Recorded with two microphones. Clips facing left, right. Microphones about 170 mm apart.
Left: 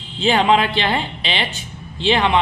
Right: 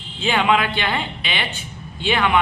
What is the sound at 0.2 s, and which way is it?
A man's voice, 35° left (ahead or behind).